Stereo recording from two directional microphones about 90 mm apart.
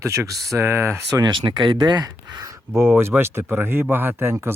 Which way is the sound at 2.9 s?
20° right (ahead or behind).